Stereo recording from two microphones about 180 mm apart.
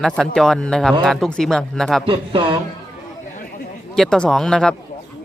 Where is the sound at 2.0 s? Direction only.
30° right (ahead or behind).